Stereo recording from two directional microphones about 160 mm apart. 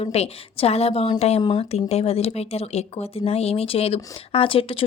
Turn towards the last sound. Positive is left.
turn(degrees=35)  # may be behind; listen again after turning